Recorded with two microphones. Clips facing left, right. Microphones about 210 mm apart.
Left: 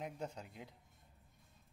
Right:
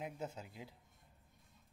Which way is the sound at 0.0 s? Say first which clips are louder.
Even; 5° right (ahead or behind).